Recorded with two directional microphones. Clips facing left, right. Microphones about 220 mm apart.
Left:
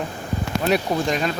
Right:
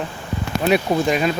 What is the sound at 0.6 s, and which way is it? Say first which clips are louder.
Speech: right 4 dB; 5° right (ahead or behind).